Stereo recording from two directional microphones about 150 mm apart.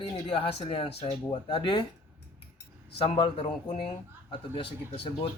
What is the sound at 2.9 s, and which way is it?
Speech, 35° left (ahead or behind).